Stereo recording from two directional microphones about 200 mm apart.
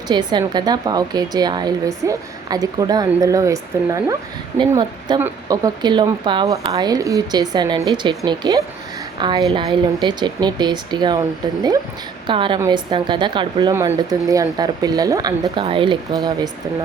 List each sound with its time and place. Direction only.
0.1 s a woman's voice: 20° right (ahead or behind)